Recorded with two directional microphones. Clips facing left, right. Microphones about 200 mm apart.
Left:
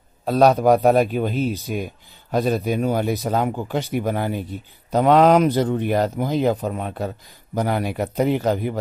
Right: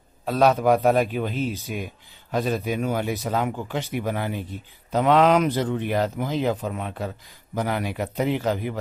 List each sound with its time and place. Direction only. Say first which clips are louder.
0.2 s speech: left 4 dB; 35° left (ahead or behind)